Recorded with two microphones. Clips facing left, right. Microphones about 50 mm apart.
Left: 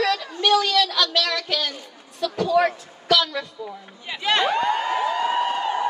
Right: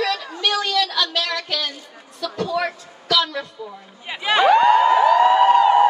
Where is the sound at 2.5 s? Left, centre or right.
Left.